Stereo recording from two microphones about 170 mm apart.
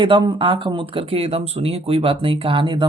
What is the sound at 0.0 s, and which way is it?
Speech, 30° right (ahead or behind).